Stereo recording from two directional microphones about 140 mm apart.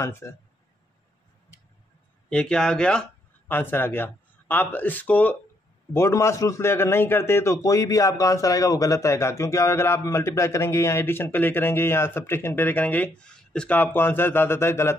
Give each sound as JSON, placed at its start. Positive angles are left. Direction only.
{"t": 0.0, "sound": "speech", "side_deg": 20}
{"t": 2.2, "sound": "a man's voice", "side_deg": 5}